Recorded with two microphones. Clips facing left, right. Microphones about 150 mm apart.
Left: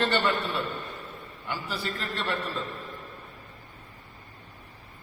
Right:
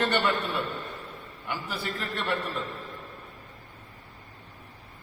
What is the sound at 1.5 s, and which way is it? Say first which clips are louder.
Speech: even; 15° right (ahead or behind).